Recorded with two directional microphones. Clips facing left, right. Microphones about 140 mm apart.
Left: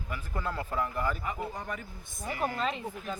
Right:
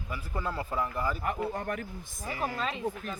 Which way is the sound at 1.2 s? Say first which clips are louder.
Right 4 dB; 55° right (ahead or behind).